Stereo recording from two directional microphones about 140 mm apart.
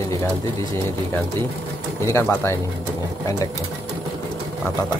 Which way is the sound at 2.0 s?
15° left (ahead or behind).